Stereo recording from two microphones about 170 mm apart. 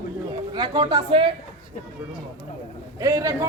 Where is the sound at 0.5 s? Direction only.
25° right (ahead or behind).